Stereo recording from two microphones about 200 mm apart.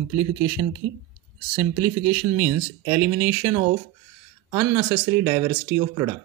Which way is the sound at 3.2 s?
10° right (ahead or behind).